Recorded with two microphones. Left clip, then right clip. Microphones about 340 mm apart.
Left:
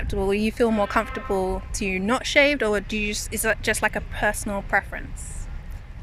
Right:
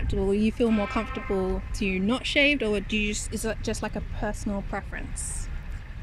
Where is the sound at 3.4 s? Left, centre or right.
Left.